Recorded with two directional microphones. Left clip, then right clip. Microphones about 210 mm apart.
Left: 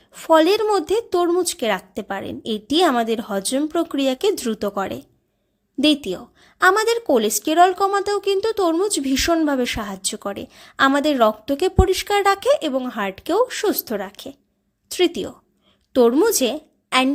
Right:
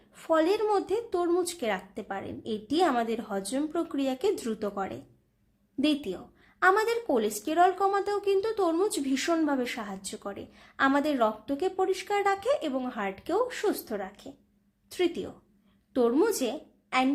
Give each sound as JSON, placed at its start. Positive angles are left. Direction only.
{"t": 0.1, "sound": "a woman's voice", "side_deg": 40}